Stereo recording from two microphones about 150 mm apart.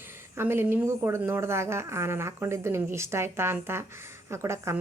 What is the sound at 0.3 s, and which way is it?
Speech, 15° right (ahead or behind).